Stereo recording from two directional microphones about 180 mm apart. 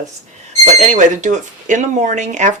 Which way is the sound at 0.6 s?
40° right (ahead or behind).